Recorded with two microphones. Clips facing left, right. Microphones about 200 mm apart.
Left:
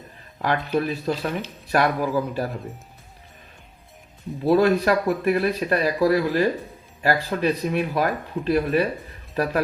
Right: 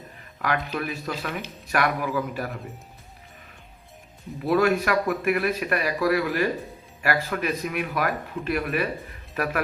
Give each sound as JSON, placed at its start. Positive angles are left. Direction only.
{"t": 0.3, "sound": "speech", "side_deg": 30}
{"t": 4.4, "sound": "speech", "side_deg": 35}